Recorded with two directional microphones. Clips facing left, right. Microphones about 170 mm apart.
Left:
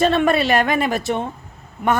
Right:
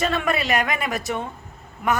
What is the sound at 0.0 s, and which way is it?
A woman's voice, 30° left (ahead or behind).